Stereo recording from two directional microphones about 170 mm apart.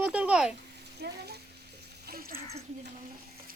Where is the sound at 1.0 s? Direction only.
80° right.